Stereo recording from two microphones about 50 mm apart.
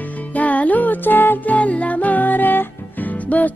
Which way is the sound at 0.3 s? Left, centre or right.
Left.